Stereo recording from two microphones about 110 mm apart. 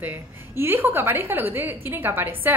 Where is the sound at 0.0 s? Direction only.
20° right (ahead or behind).